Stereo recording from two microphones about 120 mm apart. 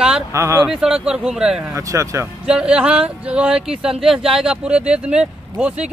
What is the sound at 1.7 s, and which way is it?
Speech, 25° right (ahead or behind).